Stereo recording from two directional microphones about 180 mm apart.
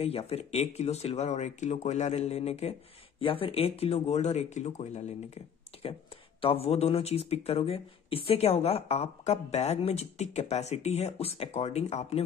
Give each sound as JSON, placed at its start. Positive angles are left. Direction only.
{"t": 0.0, "sound": "speech", "side_deg": 35}
{"t": 6.4, "sound": "speech", "side_deg": 35}